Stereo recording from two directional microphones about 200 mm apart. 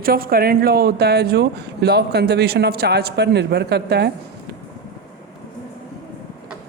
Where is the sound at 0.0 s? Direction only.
50° right (ahead or behind).